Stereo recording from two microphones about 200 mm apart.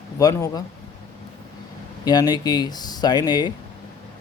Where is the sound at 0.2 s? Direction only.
15° left (ahead or behind).